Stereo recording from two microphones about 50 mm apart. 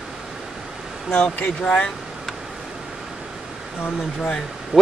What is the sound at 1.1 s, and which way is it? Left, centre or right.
Speech, left.